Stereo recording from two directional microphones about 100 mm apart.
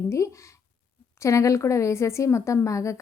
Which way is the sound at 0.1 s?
30° left (ahead or behind).